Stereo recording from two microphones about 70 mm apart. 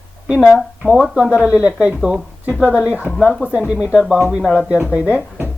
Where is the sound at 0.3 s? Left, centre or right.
Centre.